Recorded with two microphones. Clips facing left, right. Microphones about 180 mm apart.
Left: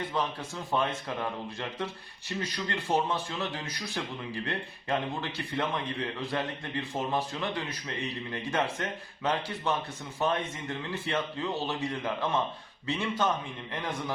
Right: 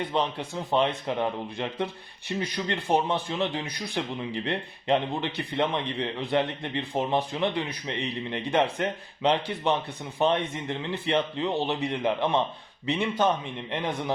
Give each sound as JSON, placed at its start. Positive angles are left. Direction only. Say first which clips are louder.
{"t": 0.1, "sound": "a man's voice", "louder": "right 4 dB", "side_deg": -20}